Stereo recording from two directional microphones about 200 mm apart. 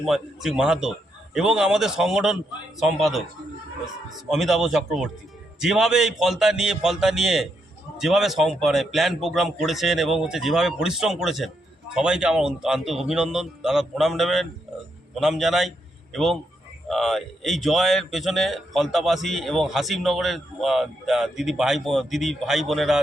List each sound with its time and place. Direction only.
0.1 s speech: 5° right (ahead or behind)
4.3 s speech: centre (ahead or behind)